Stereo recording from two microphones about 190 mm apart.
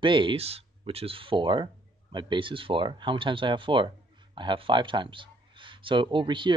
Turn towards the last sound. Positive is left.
turn(degrees=-25)  # may be behind; listen again after turning